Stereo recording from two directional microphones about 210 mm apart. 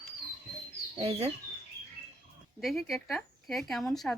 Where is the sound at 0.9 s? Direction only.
25° right (ahead or behind).